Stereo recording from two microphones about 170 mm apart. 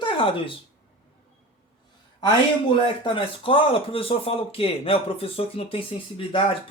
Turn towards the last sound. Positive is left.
turn(degrees=30)  # may be behind; listen again after turning